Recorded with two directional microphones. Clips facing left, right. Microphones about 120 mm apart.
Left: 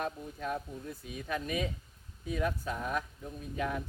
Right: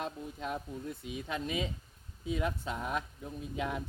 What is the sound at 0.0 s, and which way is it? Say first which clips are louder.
Speech: left 2 dB; 20° right (ahead or behind).